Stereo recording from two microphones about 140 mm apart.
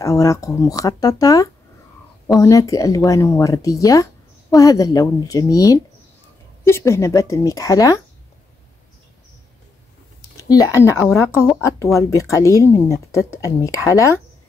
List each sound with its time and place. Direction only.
0.0 s a woman's voice: 25° left (ahead or behind)
10.5 s a woman's voice: 25° left (ahead or behind)